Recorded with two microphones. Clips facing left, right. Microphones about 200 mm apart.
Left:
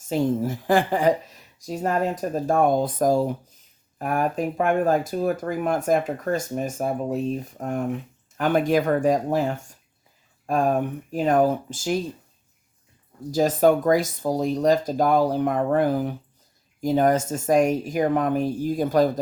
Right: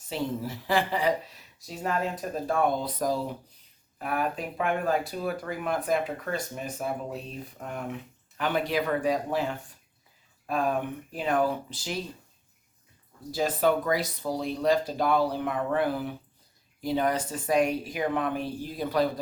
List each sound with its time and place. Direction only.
0.1 s speech: 45° left (ahead or behind)
13.3 s speech: 45° left (ahead or behind)